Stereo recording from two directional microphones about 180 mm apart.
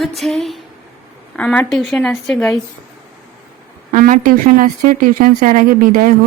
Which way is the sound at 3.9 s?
45° right (ahead or behind).